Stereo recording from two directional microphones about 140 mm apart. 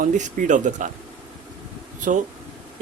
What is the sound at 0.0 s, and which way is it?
Speech, 65° right (ahead or behind).